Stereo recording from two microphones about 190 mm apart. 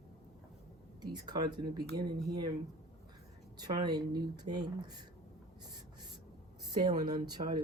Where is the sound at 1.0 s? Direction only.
25° right (ahead or behind).